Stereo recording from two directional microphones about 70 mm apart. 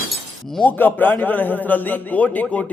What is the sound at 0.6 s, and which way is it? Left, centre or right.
A man's voice, left.